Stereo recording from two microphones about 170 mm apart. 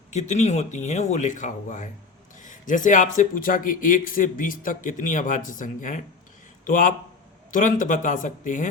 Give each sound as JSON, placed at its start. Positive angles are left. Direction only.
{"t": 0.1, "sound": "speech", "side_deg": 45}